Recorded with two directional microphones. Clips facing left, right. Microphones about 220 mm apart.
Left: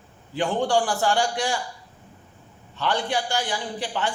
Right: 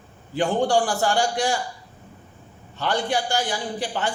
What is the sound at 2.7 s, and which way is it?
A man's voice, 45° right (ahead or behind).